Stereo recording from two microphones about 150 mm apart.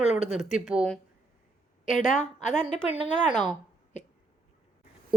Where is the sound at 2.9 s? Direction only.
35° right (ahead or behind).